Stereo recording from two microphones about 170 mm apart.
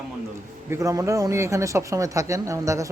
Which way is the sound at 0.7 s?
20° right (ahead or behind).